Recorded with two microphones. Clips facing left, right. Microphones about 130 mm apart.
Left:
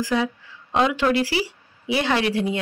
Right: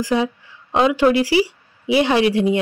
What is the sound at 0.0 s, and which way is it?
Speech, 15° right (ahead or behind).